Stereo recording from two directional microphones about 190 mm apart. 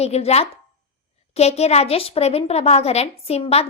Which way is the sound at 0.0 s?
35° left (ahead or behind).